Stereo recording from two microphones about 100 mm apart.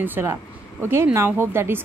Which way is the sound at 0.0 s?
20° right (ahead or behind).